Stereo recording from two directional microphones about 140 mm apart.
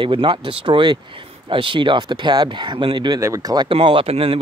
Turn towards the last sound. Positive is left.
turn(degrees=-45)  # may be behind; listen again after turning